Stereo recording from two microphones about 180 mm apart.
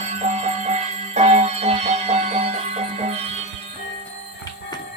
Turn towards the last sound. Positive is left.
turn(degrees=-35)  # may be behind; listen again after turning